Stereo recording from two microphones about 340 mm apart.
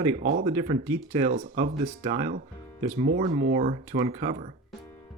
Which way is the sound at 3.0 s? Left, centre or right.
Right.